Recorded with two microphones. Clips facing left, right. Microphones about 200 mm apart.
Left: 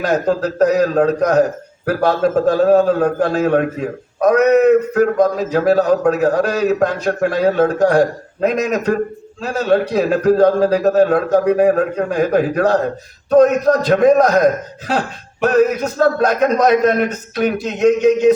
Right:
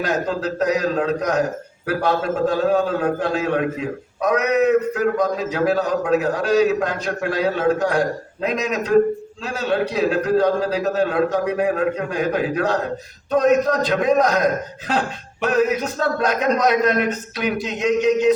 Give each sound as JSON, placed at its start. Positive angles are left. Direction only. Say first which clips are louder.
{"t": 0.0, "sound": "a man's voice", "louder": "left 5 dB", "side_deg": 45}